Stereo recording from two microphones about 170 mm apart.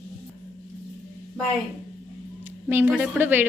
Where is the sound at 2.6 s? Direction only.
10° right (ahead or behind).